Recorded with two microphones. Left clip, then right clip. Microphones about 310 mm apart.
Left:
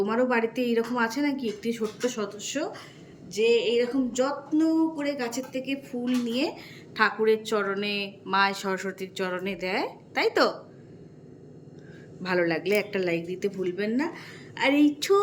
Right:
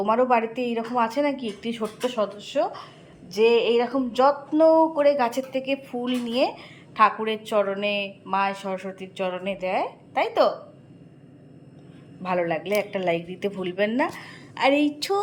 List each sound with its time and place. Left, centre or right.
0.0 s speech: centre
12.2 s speech: centre